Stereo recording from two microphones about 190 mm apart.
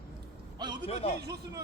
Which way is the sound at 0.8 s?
30° left (ahead or behind).